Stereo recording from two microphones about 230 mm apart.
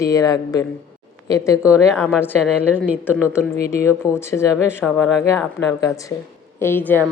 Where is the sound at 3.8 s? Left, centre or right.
Centre.